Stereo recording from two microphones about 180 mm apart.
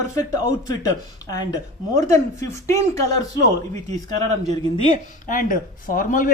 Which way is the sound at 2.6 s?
15° left (ahead or behind).